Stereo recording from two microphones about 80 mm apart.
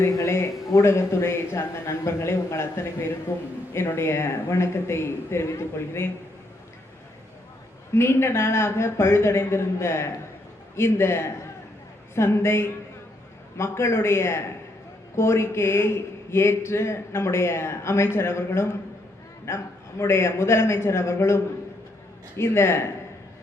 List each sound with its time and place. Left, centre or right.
0.0 s speech: left
7.9 s speech: left